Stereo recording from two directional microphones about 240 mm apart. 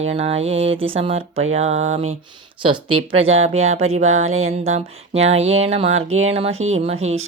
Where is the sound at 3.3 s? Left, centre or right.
Right.